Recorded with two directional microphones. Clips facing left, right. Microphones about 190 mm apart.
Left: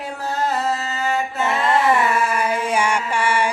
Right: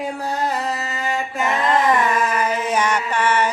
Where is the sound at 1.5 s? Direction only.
10° left (ahead or behind).